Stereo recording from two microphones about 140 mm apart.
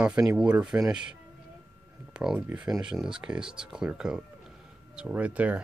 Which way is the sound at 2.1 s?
5° right (ahead or behind).